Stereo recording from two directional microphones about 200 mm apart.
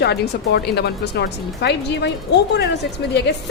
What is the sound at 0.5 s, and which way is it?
Speech, 55° left (ahead or behind).